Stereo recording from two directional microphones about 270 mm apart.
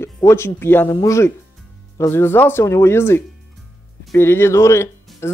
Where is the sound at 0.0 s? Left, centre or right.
Centre.